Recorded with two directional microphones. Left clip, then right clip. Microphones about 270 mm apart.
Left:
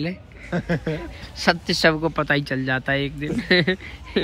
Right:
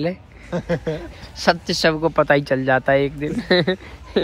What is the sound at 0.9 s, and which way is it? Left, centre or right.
Speech, centre.